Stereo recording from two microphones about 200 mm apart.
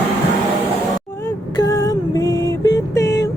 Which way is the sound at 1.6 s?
15° left (ahead or behind).